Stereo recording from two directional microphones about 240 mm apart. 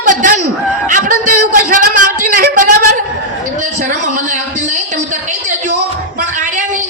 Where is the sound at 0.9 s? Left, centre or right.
Right.